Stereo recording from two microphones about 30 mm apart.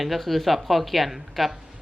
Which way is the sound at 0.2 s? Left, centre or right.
Centre.